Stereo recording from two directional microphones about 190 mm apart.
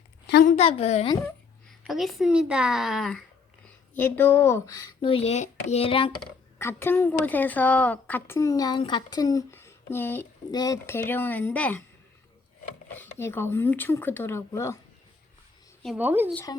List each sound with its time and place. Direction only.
0.4 s a woman's voice: 35° left (ahead or behind)
1.9 s a woman's voice: centre (ahead or behind); by 6.1 s 30° left (ahead or behind)
6.6 s a woman's voice: 10° left (ahead or behind)
13.0 s a woman's voice: 15° left (ahead or behind)
16.0 s speech: 10° right (ahead or behind)
16.3 s a woman's voice: 15° left (ahead or behind)